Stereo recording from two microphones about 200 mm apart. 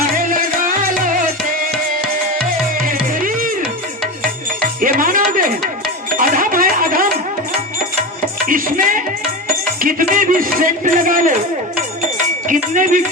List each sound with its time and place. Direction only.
0.3 s music: 45° right (ahead or behind)
2.4 s music: 45° right (ahead or behind)
4.8 s music: 45° right (ahead or behind)
6.1 s a sound: 45° right (ahead or behind)
8.4 s music: 45° right (ahead or behind)